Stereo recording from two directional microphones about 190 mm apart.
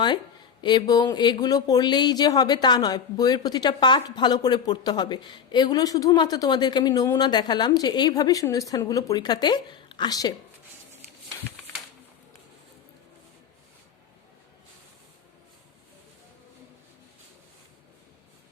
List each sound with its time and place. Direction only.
0.6 s speech: 25° left (ahead or behind)